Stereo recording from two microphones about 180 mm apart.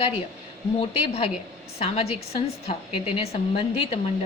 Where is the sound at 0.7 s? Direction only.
30° left (ahead or behind).